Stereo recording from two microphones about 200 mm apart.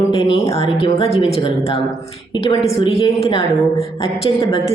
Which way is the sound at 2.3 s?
25° left (ahead or behind).